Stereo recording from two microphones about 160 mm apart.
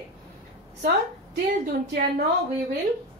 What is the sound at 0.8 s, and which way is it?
A woman's voice, 85° right.